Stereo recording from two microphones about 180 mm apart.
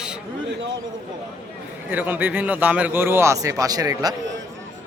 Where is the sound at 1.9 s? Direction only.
10° right (ahead or behind).